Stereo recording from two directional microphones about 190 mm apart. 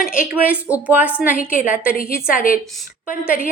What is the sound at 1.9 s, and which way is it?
Speech, 45° left (ahead or behind).